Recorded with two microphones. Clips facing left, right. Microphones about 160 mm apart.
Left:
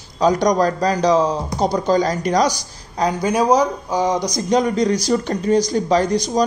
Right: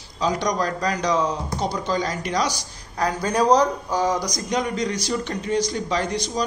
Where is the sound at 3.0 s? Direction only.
15° left (ahead or behind).